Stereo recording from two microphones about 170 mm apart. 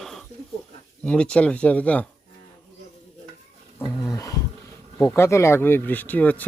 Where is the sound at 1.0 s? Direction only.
5° left (ahead or behind).